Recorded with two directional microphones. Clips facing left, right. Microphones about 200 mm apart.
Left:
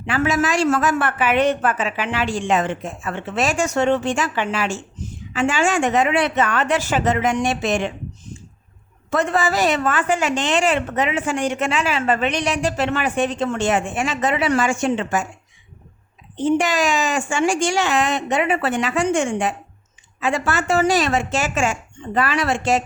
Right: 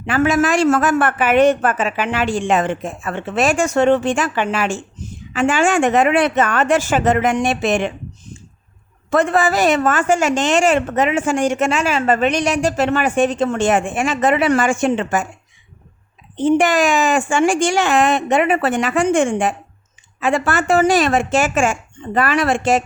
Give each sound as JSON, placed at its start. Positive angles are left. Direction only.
{"t": 0.0, "sound": "a woman's voice", "side_deg": -50}
{"t": 9.0, "sound": "a woman's voice", "side_deg": -55}
{"t": 16.6, "sound": "a woman's voice", "side_deg": -55}